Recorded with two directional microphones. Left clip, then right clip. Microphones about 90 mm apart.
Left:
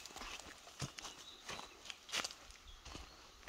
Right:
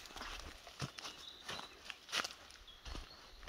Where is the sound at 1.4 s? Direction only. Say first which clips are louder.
Right 2 dB; centre (ahead or behind).